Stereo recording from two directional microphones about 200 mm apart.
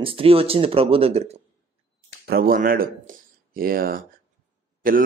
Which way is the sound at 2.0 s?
50° right (ahead or behind).